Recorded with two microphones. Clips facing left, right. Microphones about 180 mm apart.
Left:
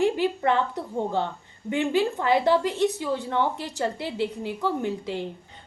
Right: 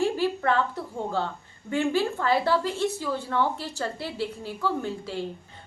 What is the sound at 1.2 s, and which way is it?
A woman's voice, 20° left (ahead or behind).